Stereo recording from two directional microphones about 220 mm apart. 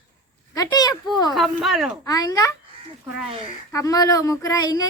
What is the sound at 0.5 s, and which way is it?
Speech, 15° left (ahead or behind).